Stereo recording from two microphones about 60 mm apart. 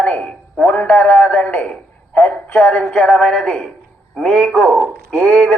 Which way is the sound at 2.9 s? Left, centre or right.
Centre.